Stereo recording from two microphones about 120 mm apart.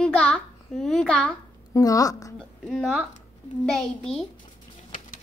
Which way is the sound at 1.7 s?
30° left (ahead or behind).